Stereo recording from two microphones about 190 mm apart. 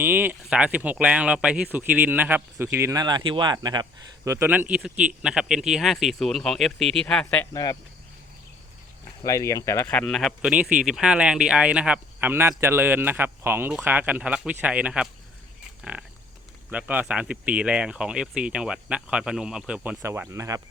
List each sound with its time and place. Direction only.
0.0 s speech: 10° right (ahead or behind); by 7.4 s 5° left (ahead or behind)
7.5 s speech: 20° left (ahead or behind)
9.2 s speech: 15° left (ahead or behind); by 15.1 s 5° right (ahead or behind)
15.8 s frog: 5° right (ahead or behind)
16.6 s speech: 5° right (ahead or behind)